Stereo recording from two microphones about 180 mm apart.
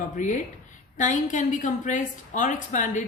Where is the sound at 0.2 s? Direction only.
45° left (ahead or behind).